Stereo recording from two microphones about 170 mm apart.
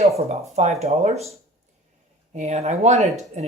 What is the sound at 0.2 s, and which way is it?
Speech, 40° right (ahead or behind).